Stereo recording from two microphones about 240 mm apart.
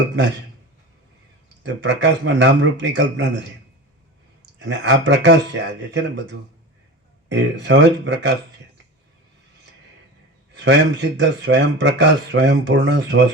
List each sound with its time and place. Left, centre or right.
1.6 s speech: right
4.6 s speech: right
10.5 s speech: right